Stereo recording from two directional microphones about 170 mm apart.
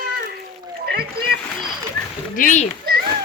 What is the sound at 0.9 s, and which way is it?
Speech, 65° right (ahead or behind).